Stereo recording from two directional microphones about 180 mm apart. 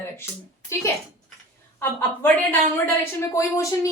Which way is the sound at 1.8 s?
10° left (ahead or behind).